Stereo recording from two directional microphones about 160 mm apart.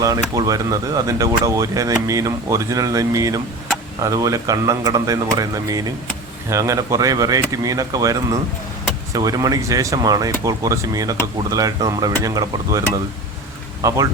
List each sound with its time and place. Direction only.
0.0 s speech: 20° right (ahead or behind)